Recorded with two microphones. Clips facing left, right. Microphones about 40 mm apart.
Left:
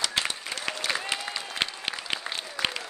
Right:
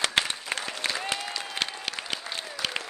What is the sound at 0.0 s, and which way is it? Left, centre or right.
Applause, right.